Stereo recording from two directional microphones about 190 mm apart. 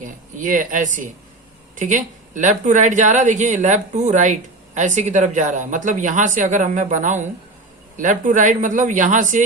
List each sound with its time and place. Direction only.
0.0 s speech: 45° right (ahead or behind)